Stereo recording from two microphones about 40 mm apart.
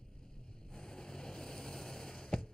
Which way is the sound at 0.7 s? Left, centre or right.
Centre.